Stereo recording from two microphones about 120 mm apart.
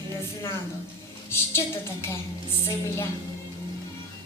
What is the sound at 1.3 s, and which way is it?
Speech, 20° left (ahead or behind).